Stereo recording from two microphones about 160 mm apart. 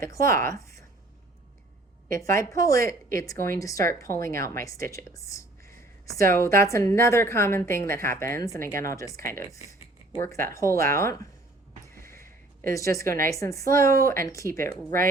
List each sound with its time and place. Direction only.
0.1 s a woman's voice: 20° left (ahead or behind)
2.1 s a woman's voice: 20° left (ahead or behind)
11.9 s a sound: 15° left (ahead or behind)
12.6 s a woman's voice: 20° left (ahead or behind)